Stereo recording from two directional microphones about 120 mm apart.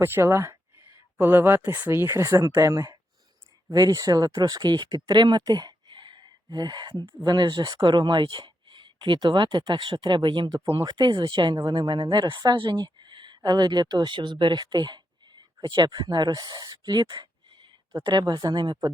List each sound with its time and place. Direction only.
0.0 s speech: 20° right (ahead or behind); by 18.9 s 40° right (ahead or behind)